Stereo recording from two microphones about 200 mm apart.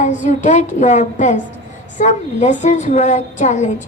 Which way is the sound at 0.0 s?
35° left (ahead or behind).